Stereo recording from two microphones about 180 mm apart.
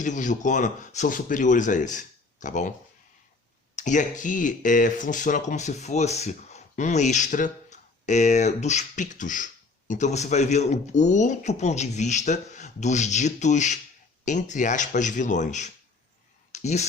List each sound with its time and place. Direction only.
0.0 s speech: 45° left (ahead or behind)
3.8 s speech: 45° left (ahead or behind)
16.5 s a sound: 40° left (ahead or behind)